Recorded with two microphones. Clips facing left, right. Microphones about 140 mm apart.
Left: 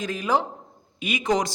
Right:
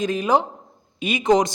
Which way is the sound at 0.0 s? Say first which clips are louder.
Right 4 dB; 20° right (ahead or behind).